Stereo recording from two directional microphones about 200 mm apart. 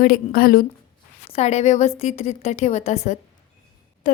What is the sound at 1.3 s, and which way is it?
A woman's voice, 30° left (ahead or behind).